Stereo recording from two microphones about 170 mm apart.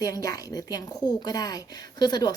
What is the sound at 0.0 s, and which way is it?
Speech, 20° left (ahead or behind).